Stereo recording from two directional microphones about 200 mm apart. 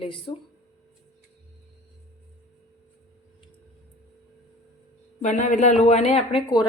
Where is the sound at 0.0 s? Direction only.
25° left (ahead or behind).